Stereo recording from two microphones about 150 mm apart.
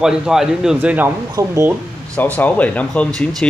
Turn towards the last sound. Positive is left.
turn(degrees=10)  # may be behind; listen again after turning